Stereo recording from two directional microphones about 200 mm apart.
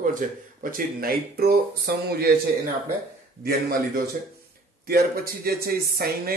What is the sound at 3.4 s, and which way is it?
Speech, 50° right (ahead or behind).